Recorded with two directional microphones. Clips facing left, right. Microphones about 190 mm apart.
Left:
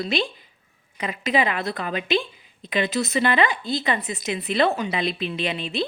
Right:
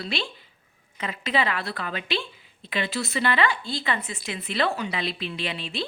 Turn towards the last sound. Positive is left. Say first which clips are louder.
# left 5 dB
turn(degrees=20)  # may be behind; listen again after turning